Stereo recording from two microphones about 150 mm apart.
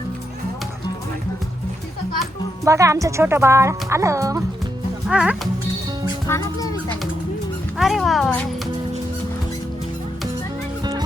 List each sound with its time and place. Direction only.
2.6 s speech: 20° right (ahead or behind)
5.0 s music: 5° right (ahead or behind)
6.2 s music: 20° left (ahead or behind)
7.8 s speech: centre (ahead or behind)